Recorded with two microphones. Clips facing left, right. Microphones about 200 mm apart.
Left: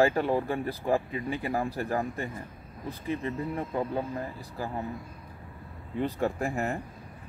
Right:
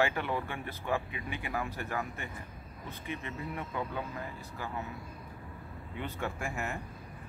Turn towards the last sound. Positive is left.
turn(degrees=35)  # may be behind; listen again after turning